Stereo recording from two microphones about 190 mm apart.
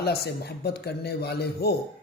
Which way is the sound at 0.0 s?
60° left (ahead or behind).